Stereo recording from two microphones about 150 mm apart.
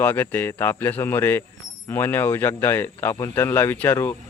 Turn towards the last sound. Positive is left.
turn(degrees=15)  # may be behind; listen again after turning